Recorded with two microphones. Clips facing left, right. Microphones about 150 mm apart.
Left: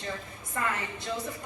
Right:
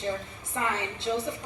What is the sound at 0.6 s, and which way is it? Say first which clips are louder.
Speech: right 2 dB; 25° right (ahead or behind).